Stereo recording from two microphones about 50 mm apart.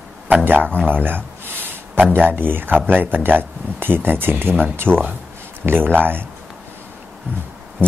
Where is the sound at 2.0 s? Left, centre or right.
Right.